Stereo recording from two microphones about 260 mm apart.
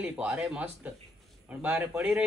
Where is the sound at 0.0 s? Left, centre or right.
Centre.